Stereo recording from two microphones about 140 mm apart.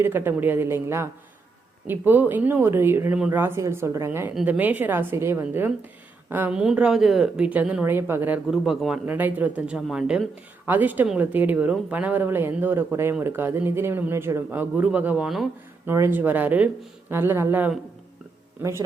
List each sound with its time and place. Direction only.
0.0 s speech: 15° right (ahead or behind)
8.4 s speech: 5° right (ahead or behind)
15.9 s speech: 15° right (ahead or behind)